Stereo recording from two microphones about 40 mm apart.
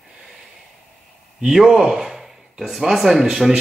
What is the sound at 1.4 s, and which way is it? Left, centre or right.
Speech, centre.